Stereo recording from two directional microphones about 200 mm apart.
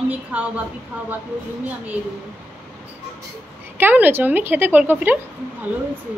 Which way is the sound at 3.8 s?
10° right (ahead or behind).